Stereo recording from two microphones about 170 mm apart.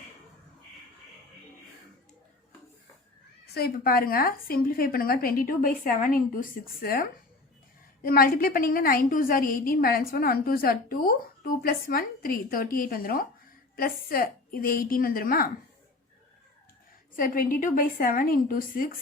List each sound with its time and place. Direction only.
3.5 s a woman's voice: 65° left (ahead or behind)
17.2 s a woman's voice: 55° left (ahead or behind)